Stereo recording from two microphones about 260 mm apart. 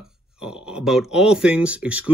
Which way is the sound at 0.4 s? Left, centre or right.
Centre.